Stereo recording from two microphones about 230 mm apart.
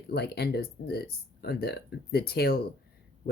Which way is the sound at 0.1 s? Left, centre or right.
Left.